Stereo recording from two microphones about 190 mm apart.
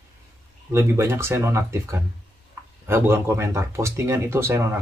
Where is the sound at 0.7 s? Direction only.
15° right (ahead or behind).